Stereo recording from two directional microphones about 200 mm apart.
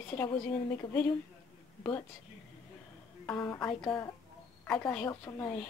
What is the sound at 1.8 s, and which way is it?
Speech, 15° left (ahead or behind).